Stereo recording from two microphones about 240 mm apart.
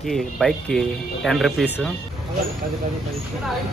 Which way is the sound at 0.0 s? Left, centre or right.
Centre.